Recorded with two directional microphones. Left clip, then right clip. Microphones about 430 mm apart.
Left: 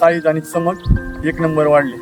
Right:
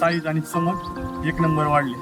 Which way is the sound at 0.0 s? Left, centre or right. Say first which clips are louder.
Left 9 dB; centre.